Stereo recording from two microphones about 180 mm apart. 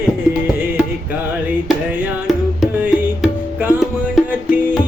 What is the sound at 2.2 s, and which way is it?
Music, centre (ahead or behind).